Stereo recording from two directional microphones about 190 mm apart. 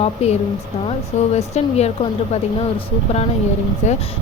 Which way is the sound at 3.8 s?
35° left (ahead or behind).